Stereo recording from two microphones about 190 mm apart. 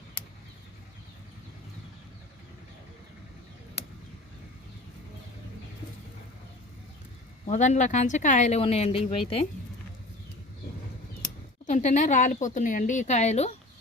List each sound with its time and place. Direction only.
7.4 s speech: 35° left (ahead or behind)
11.6 s speech: 40° left (ahead or behind)